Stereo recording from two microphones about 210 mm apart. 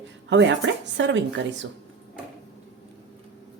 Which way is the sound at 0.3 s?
60° right (ahead or behind).